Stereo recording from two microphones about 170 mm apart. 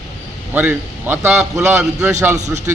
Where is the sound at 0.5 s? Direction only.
10° right (ahead or behind).